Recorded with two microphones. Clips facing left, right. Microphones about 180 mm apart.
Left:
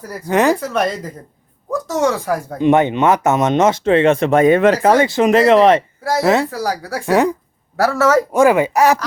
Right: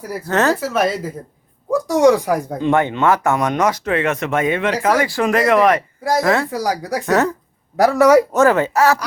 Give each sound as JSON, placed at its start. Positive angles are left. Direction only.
{"t": 0.3, "sound": "speech", "side_deg": 15}
{"t": 0.6, "sound": "speech", "side_deg": -5}
{"t": 2.6, "sound": "speech", "side_deg": 20}
{"t": 6.0, "sound": "speech", "side_deg": -15}
{"t": 6.2, "sound": "speech", "side_deg": 20}
{"t": 6.5, "sound": "speech", "side_deg": -15}
{"t": 7.0, "sound": "speech", "side_deg": 15}
{"t": 7.8, "sound": "speech", "side_deg": -15}
{"t": 8.3, "sound": "speech", "side_deg": 10}